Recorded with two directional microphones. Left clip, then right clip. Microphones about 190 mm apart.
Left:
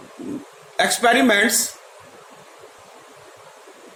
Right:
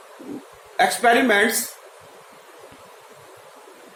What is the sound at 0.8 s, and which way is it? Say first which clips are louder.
Speech: even; 45° left (ahead or behind).